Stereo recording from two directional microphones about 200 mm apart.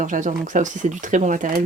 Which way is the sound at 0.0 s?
40° right (ahead or behind).